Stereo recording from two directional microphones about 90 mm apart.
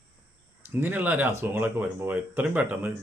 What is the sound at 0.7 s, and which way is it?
Speech, 20° right (ahead or behind).